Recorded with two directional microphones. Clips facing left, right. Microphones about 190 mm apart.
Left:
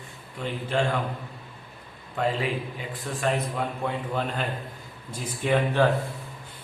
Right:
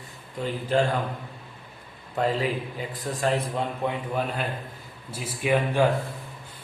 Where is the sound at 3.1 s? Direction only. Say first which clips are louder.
Right 1 dB; 35° right (ahead or behind).